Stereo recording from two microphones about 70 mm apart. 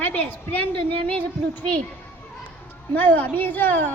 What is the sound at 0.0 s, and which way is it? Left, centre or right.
Speech, left.